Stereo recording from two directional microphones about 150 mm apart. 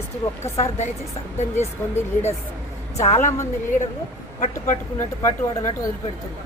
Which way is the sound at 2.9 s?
45° left (ahead or behind).